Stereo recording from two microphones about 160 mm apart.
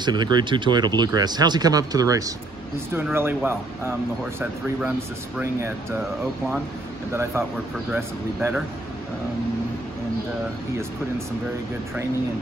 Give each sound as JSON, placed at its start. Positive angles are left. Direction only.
{"t": 0.0, "sound": "speech", "side_deg": -25}
{"t": 5.4, "sound": "speech", "side_deg": -15}
{"t": 7.3, "sound": "speech", "side_deg": -15}